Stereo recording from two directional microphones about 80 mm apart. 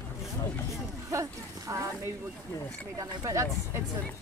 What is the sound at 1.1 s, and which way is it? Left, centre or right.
Speech, right.